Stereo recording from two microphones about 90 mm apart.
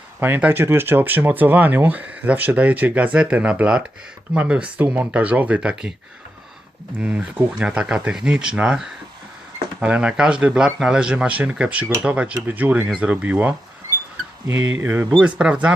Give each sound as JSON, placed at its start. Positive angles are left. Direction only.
{"t": 0.2, "sound": "speech", "side_deg": -20}
{"t": 7.0, "sound": "speech", "side_deg": -15}